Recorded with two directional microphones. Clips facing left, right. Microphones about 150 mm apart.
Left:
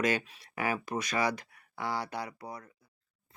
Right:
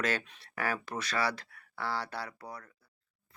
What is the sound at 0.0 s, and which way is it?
Speech, 15° left (ahead or behind).